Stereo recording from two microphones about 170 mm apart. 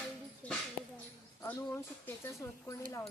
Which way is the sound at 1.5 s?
15° left (ahead or behind).